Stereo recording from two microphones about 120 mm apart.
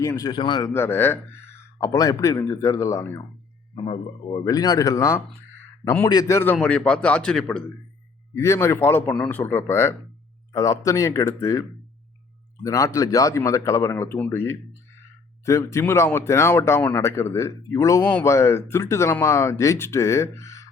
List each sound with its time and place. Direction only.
0.0 s speech: 30° left (ahead or behind)
0.3 s a man's voice: 40° left (ahead or behind)
0.7 s speech: 20° left (ahead or behind)
4.4 s a man's voice: 30° left (ahead or behind)
6.1 s speech: 30° left (ahead or behind)
6.6 s speech: 10° left (ahead or behind)
8.4 s speech: 20° left (ahead or behind)
12.6 s speech: 25° left (ahead or behind)